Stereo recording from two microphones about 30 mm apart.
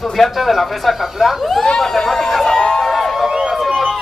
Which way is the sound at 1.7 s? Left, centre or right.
Centre.